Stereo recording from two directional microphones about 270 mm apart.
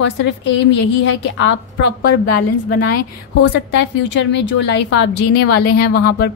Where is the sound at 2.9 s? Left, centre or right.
Left.